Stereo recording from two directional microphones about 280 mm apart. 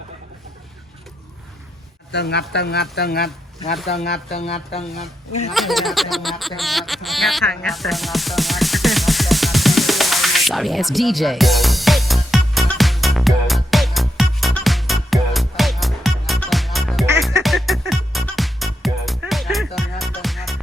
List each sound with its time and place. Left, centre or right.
2.1 s speech: left
4.3 s speech: left
4.9 s a sound: centre
6.6 s music: centre